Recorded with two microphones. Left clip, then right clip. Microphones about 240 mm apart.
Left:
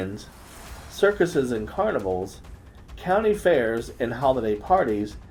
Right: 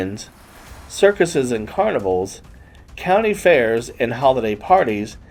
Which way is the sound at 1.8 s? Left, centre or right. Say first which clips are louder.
Right 6 dB; right.